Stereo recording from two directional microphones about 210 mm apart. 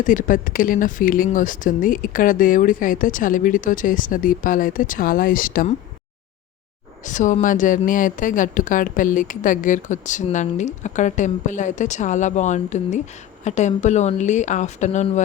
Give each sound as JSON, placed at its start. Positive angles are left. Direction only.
{"t": 0.0, "sound": "a woman's voice", "side_deg": 40}
{"t": 7.0, "sound": "a woman's voice", "side_deg": 35}